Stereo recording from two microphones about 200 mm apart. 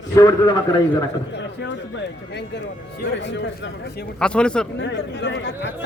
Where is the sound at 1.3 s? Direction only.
65° left (ahead or behind).